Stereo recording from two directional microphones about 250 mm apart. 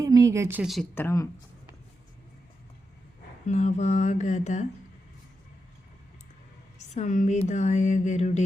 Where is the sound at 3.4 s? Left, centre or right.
Left.